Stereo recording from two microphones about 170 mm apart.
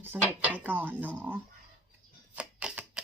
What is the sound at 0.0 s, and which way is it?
Speech, 10° right (ahead or behind).